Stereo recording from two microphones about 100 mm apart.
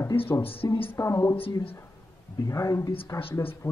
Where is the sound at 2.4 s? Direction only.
30° left (ahead or behind).